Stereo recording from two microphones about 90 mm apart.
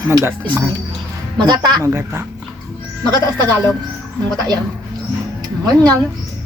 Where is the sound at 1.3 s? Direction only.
55° right (ahead or behind).